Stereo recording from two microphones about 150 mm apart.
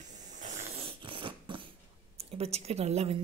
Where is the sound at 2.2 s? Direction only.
40° right (ahead or behind).